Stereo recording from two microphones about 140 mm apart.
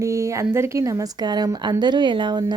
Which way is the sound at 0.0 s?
20° right (ahead or behind).